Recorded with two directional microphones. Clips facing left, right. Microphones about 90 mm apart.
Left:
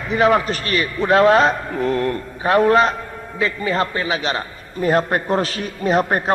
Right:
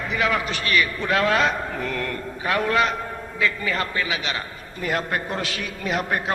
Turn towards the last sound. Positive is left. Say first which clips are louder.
# left 7 dB
turn(degrees=35)  # may be behind; listen again after turning